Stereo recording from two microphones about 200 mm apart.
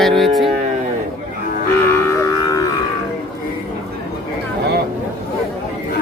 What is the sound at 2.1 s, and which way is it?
Music, 15° left (ahead or behind).